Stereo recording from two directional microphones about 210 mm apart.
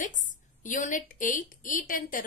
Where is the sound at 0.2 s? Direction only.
35° left (ahead or behind).